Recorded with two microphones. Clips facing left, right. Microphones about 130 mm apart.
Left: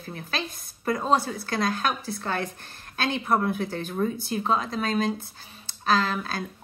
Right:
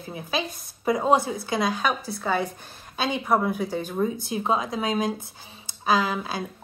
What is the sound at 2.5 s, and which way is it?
A woman's voice, 10° right (ahead or behind).